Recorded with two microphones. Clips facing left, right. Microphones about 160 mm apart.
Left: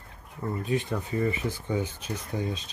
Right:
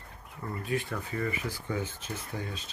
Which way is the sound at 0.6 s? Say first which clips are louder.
Left 3 dB; 20° left (ahead or behind).